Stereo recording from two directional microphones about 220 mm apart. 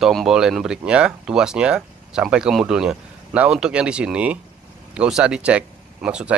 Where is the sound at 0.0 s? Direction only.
Centre (ahead or behind).